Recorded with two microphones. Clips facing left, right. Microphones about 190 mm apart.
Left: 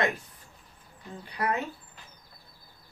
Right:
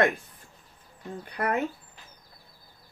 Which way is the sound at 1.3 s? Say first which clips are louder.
Right 2 dB; 55° right (ahead or behind).